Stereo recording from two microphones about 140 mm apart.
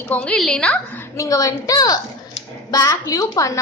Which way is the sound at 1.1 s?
25° left (ahead or behind).